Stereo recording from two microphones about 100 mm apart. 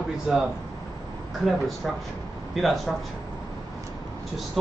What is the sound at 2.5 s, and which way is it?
Speech, centre (ahead or behind).